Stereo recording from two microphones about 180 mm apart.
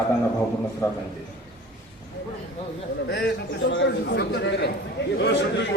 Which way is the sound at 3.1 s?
70° left (ahead or behind).